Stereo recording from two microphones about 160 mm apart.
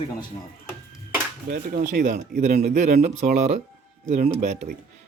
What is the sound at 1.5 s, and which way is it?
Speech, 50° right (ahead or behind).